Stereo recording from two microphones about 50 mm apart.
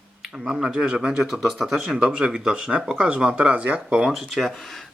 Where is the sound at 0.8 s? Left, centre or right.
Centre.